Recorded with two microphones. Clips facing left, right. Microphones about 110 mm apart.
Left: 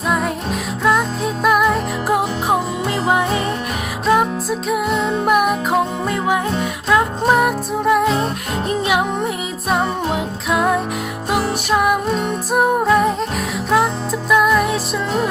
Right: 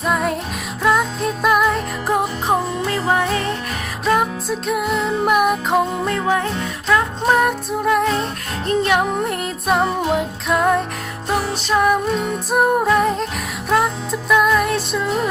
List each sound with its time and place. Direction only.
0.1 s music: centre (ahead or behind)
2.8 s music: 15° left (ahead or behind)
4.0 s music: centre (ahead or behind)
6.1 s music: 15° left (ahead or behind)